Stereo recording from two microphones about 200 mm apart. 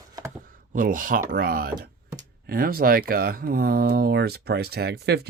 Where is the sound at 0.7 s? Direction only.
45° right (ahead or behind).